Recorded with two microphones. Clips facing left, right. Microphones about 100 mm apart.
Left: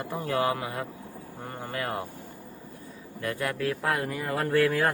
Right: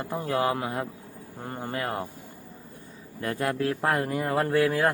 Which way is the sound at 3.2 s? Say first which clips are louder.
Right 3 dB; 35° right (ahead or behind).